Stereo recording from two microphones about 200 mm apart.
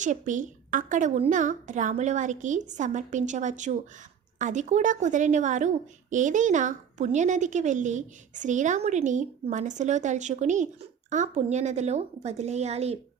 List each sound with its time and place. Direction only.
0.0 s a woman's voice: 40° right (ahead or behind)